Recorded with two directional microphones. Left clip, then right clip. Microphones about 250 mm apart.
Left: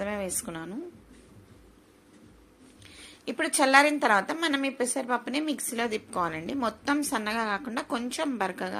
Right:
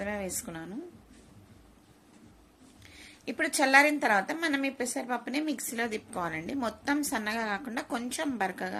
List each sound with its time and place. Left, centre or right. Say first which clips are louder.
0.0 s a woman's voice: left 3 dB; centre
3.2 s a woman's voice: left 2 dB; centre